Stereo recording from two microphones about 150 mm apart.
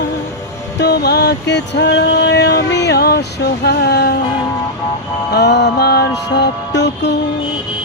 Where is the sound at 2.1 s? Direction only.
90° left.